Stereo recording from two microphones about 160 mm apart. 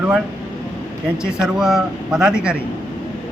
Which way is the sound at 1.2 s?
5° right (ahead or behind).